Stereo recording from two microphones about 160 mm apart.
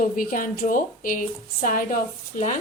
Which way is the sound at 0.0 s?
60° left (ahead or behind).